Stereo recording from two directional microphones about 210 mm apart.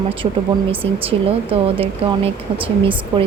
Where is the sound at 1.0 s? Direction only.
25° right (ahead or behind).